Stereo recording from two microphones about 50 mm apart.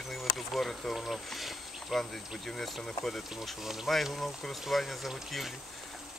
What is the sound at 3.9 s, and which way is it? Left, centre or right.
Speech, centre.